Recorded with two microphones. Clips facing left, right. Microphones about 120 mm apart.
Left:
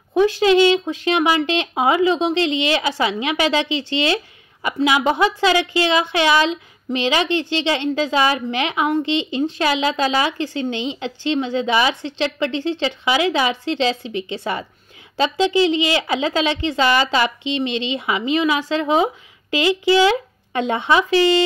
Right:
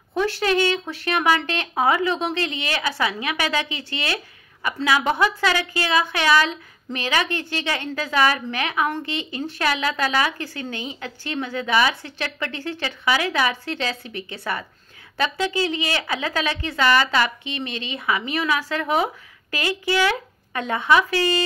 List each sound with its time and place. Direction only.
0.1 s a woman's voice: 15° left (ahead or behind)